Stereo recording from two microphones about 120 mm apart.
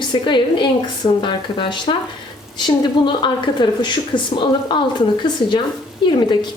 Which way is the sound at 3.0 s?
40° left (ahead or behind).